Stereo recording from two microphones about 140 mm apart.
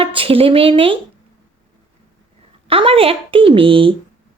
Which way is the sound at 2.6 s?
40° right (ahead or behind).